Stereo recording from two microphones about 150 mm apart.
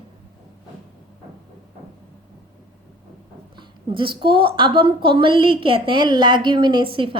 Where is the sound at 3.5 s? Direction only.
35° right (ahead or behind).